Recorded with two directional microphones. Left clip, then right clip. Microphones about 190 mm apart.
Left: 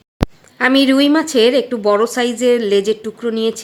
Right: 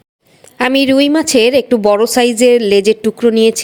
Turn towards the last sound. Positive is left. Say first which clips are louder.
# right 8 dB
turn(degrees=-35)  # may be behind; listen again after turning